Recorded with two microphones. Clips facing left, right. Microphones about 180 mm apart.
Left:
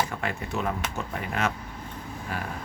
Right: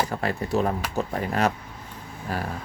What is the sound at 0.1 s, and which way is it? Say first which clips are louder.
A man's voice: right 6 dB; 35° right (ahead or behind).